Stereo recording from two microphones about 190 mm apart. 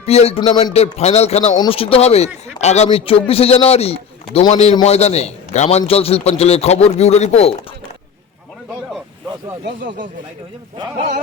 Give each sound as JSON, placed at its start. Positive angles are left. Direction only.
{"t": 0.0, "sound": "speech", "side_deg": 35}
{"t": 9.6, "sound": "speech", "side_deg": -45}